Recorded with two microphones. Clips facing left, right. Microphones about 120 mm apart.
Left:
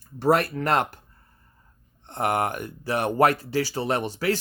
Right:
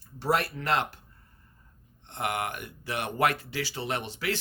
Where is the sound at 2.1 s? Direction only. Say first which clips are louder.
Left 7 dB; 40° left (ahead or behind).